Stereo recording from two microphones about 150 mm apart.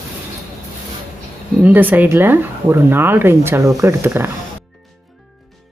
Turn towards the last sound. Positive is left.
turn(degrees=-15)  # may be behind; listen again after turning